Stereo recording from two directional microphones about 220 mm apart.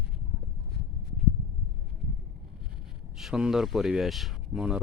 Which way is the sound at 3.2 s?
5° right (ahead or behind).